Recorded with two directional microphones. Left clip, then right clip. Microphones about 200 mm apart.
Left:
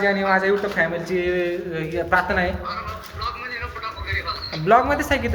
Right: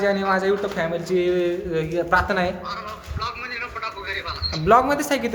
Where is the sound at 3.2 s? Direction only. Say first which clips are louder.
Even; 45° right (ahead or behind).